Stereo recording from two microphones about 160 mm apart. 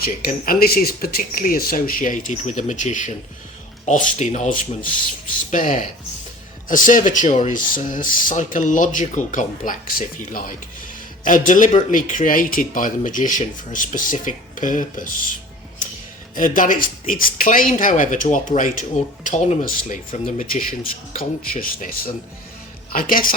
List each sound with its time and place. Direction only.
0.0 s speech: 70° left (ahead or behind)
16.3 s a woman's voice: 55° left (ahead or behind)